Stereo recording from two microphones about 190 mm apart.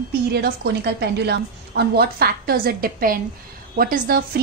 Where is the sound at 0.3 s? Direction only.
60° right (ahead or behind).